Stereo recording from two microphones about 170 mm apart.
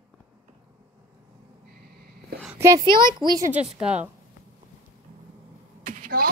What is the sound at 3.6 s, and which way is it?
Speech, 5° right (ahead or behind).